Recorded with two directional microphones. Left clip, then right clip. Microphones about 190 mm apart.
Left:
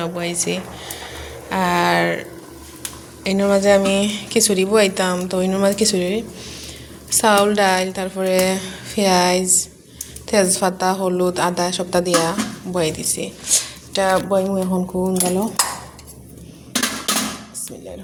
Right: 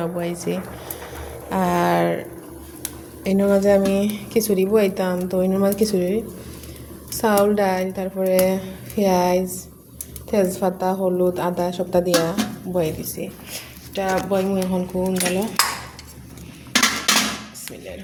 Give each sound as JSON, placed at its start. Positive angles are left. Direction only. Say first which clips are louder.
{"t": 0.0, "sound": "speech", "louder": "left 2 dB", "side_deg": -20}
{"t": 3.2, "sound": "a woman's voice", "louder": "left 2 dB", "side_deg": -15}
{"t": 13.4, "sound": "speech", "louder": "left 13 dB", "side_deg": 50}
{"t": 13.9, "sound": "speech", "louder": "left 4 dB", "side_deg": 15}